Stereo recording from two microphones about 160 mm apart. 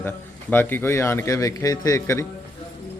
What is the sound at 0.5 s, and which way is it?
A man's voice, 15° left (ahead or behind).